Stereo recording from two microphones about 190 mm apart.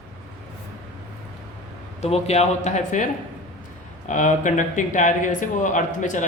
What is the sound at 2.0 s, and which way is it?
A man's voice, 35° left (ahead or behind).